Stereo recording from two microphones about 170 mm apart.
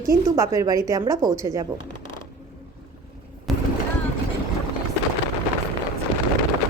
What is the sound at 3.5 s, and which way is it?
Vehicle, centre (ahead or behind).